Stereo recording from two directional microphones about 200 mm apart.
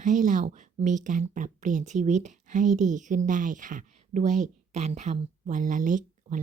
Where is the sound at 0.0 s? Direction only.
40° right (ahead or behind).